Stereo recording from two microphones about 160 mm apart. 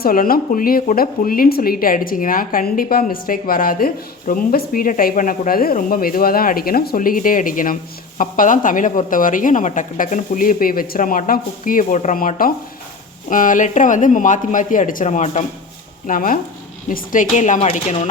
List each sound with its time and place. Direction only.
0.0 s speech: 65° left (ahead or behind); by 15.4 s 45° left (ahead or behind)
16.0 s speech: 60° left (ahead or behind); by 18.1 s 40° left (ahead or behind)